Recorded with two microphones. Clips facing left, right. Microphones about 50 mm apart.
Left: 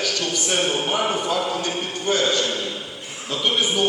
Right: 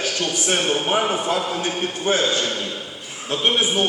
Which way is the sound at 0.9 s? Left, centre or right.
Centre.